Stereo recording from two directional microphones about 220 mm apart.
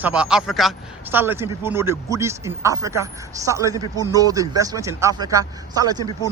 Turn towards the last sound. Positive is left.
turn(degrees=-15)  # may be behind; listen again after turning